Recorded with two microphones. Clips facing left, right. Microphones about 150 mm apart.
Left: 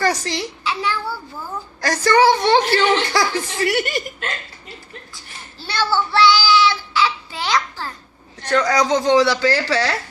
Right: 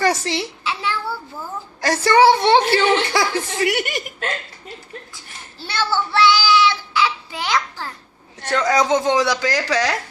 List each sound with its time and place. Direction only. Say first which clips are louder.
0.0 s a child's voice: right 1 dB; 20° right (ahead or behind)
0.6 s child singing: left 2 dB; 25° right (ahead or behind)
1.8 s a woman's voice: right 1 dB; 25° right (ahead or behind)
5.6 s child singing: left 2 dB; 20° right (ahead or behind)
8.4 s a woman's voice: even; 20° right (ahead or behind)